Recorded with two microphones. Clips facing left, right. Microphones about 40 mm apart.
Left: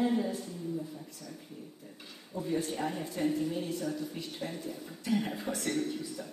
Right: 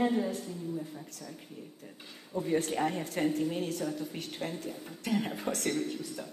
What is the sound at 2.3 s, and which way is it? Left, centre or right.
Speech, right.